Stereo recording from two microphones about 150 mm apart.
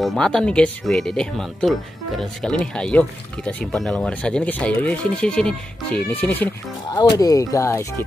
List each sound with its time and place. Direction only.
0.0 s speech: centre (ahead or behind)
6.9 s speech: 25° left (ahead or behind)